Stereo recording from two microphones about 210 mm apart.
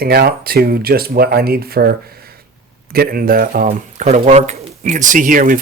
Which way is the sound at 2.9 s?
45° right (ahead or behind).